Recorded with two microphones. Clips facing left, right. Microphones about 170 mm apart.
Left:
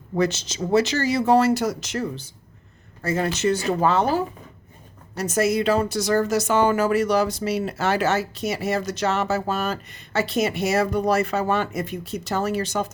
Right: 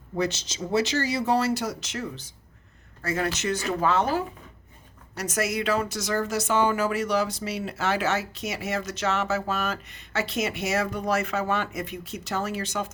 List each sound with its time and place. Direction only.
0.2 s a woman's voice: 50° left (ahead or behind)